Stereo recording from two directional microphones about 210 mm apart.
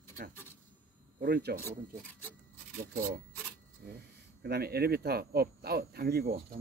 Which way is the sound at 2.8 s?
40° right (ahead or behind).